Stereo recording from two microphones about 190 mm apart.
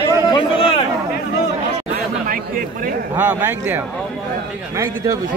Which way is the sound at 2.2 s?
50° right (ahead or behind).